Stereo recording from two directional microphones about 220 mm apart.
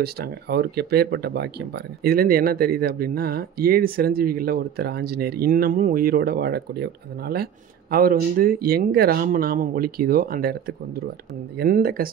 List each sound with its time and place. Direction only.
0.0 s speech: 45° right (ahead or behind)
11.5 s speech: 40° right (ahead or behind)